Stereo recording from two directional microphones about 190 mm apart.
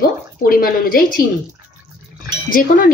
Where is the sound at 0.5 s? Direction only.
50° left (ahead or behind).